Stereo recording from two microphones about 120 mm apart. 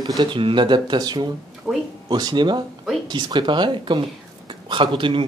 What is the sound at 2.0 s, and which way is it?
Speech, 35° right (ahead or behind).